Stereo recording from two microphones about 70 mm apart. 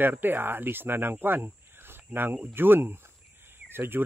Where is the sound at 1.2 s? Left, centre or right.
Right.